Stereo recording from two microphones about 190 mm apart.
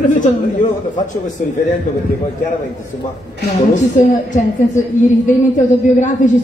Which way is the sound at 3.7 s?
40° left (ahead or behind).